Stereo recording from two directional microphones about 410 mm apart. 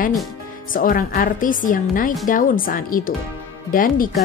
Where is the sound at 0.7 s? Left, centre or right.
Centre.